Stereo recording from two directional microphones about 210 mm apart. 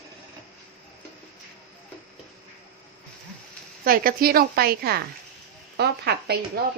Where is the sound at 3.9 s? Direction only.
45° right (ahead or behind).